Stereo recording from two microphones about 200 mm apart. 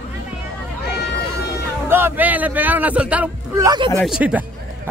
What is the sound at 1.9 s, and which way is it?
A man's voice, 10° right (ahead or behind).